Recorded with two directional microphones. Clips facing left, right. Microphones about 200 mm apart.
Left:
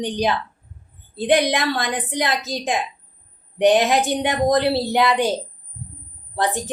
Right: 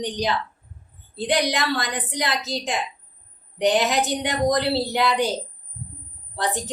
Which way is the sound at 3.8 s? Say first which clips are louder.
Left 4 dB; 55° left (ahead or behind).